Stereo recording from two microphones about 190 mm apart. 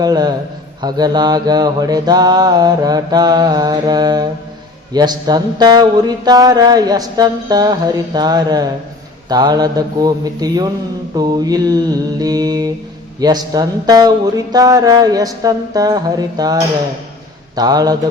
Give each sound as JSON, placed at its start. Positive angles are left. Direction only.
{"t": 0.0, "sound": "speech", "side_deg": -20}